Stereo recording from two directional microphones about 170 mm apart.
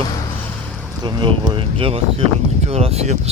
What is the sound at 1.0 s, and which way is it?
Speech, 30° right (ahead or behind).